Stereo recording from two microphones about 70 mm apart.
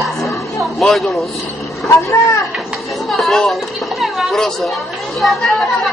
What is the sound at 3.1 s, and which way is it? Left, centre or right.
Chatter, centre.